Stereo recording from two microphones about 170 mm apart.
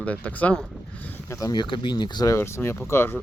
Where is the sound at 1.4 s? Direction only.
25° left (ahead or behind).